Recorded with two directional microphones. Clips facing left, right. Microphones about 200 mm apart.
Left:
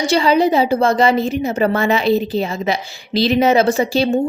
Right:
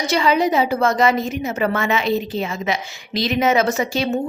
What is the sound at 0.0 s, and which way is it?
A woman's voice, 30° left (ahead or behind).